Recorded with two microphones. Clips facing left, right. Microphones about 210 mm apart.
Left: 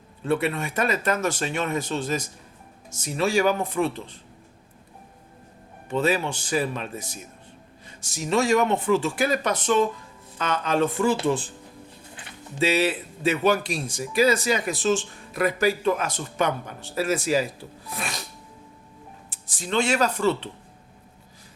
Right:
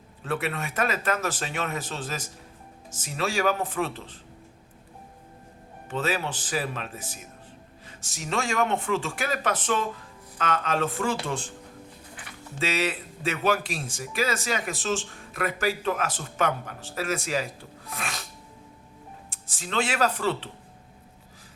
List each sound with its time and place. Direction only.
0.3 s a man's voice: centre (ahead or behind)
5.9 s a man's voice: centre (ahead or behind)
7.9 s music: centre (ahead or behind)
8.3 s a man's voice: centre (ahead or behind)
12.1 s bird: 25° left (ahead or behind)
12.5 s a man's voice: centre (ahead or behind)
19.3 s a man's voice: centre (ahead or behind)